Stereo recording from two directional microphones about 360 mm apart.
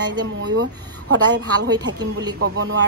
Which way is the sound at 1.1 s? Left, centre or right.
Right.